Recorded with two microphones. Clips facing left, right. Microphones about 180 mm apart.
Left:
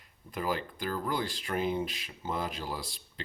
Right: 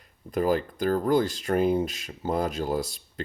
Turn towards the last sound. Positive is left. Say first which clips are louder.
# right 11 dB
turn(degrees=-45)  # may be behind; listen again after turning